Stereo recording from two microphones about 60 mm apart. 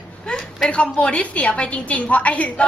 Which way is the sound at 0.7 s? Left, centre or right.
Centre.